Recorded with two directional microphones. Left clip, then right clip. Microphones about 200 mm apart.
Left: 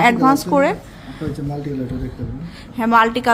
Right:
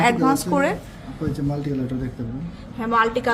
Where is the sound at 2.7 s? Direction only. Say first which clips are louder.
Left 5 dB; 35° left (ahead or behind).